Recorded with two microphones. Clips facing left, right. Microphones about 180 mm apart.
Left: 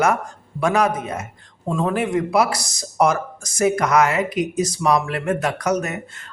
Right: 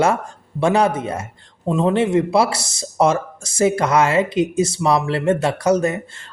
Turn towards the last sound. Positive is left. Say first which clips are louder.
# right 5 dB
turn(degrees=-30)  # may be behind; listen again after turning